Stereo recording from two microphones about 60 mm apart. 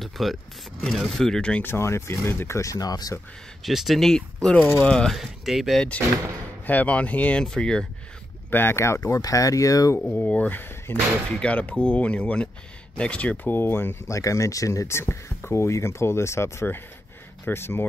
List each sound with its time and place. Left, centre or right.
0.0 s a sound: centre
0.9 s speech: centre
1.6 s speech: left
3.6 s speech: centre
5.1 s speech: centre
6.6 s speech: left
7.4 s speech: centre
8.5 s speech: left
9.2 s speech: left
9.9 s speech: left
13.5 s speech: left
14.0 s speech: left